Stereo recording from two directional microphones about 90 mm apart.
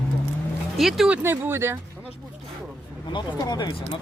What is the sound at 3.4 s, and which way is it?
Speech, 50° left (ahead or behind).